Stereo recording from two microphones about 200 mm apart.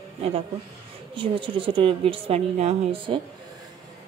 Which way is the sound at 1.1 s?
25° right (ahead or behind).